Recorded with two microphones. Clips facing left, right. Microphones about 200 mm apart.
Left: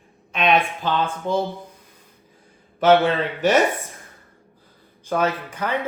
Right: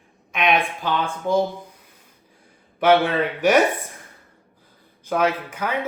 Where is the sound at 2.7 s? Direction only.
10° right (ahead or behind).